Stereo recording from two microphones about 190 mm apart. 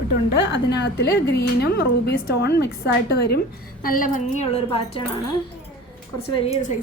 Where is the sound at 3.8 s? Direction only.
50° left (ahead or behind); by 5.0 s 30° left (ahead or behind).